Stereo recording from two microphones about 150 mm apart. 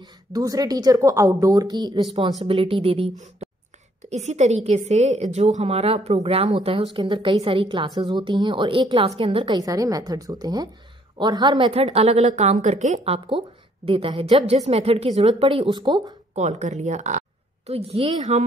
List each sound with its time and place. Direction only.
0.0 s a woman's voice: 25° right (ahead or behind)
4.1 s a woman's voice: 50° right (ahead or behind)
9.6 s a woman's voice: 25° right (ahead or behind)
16.3 s a woman's voice: 50° right (ahead or behind)
17.6 s a woman's voice: 40° right (ahead or behind)